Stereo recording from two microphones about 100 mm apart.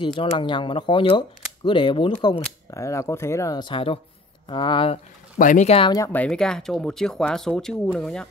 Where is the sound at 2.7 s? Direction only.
30° left (ahead or behind).